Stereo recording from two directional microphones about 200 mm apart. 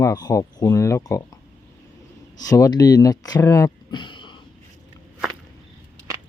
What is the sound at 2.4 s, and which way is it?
Speech, 15° left (ahead or behind).